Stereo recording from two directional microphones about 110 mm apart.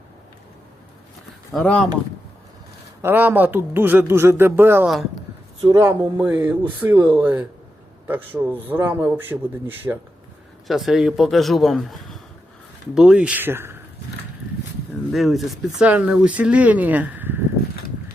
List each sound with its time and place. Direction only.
1.5 s speech: 10° left (ahead or behind)
3.0 s speech: 20° right (ahead or behind)
5.5 s a man's voice: 30° right (ahead or behind)
10.7 s a man's voice: centre (ahead or behind); by 13.7 s 20° right (ahead or behind)
15.1 s a man's voice: centre (ahead or behind); by 17.4 s 20° right (ahead or behind)